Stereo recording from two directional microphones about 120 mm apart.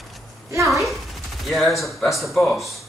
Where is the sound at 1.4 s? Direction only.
Centre (ahead or behind).